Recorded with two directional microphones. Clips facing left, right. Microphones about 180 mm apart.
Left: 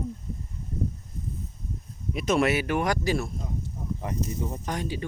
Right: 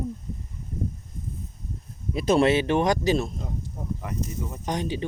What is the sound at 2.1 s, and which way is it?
Speech, 30° right (ahead or behind).